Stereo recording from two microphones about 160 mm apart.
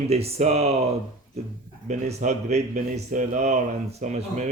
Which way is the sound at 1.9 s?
45° right (ahead or behind).